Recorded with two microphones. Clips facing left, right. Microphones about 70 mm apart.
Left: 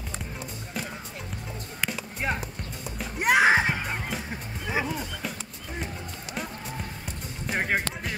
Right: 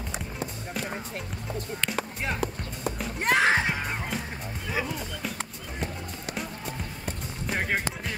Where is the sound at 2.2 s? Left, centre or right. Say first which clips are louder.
Left 4 dB; centre.